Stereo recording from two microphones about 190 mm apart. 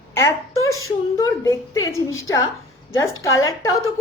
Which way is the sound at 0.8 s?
15° left (ahead or behind).